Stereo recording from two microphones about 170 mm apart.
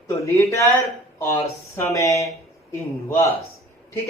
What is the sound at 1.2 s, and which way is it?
Speech, 15° left (ahead or behind).